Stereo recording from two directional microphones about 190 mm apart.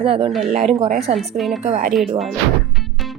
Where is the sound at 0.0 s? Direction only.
30° right (ahead or behind).